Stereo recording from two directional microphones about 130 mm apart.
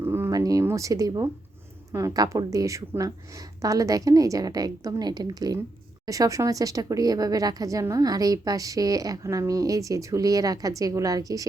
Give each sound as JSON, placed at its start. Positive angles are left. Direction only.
{"t": 0.0, "sound": "speech", "side_deg": -20}